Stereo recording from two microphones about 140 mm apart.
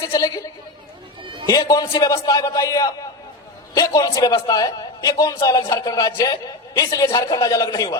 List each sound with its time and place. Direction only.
0.0 s a man's voice: 25° left (ahead or behind)
1.2 s a sound: 35° right (ahead or behind)
1.5 s a man's voice: 25° left (ahead or behind)